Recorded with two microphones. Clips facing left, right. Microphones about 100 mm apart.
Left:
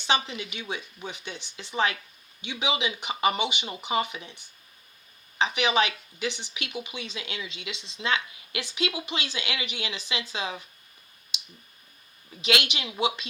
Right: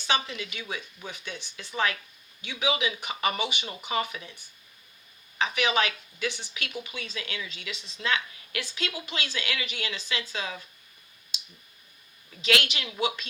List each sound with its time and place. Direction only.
0.1 s speech: 20° left (ahead or behind)
12.4 s speech: 20° left (ahead or behind)